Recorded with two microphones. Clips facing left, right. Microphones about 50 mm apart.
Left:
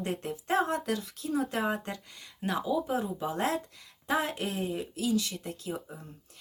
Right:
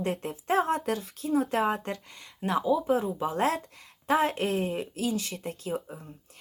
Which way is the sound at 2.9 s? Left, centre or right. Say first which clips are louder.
Right 5 dB; right.